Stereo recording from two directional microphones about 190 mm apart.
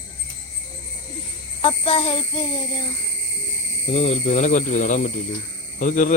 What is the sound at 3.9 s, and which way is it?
Speech, 35° left (ahead or behind).